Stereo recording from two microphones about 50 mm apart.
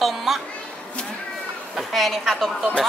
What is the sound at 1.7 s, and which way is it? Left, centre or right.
Speech, centre.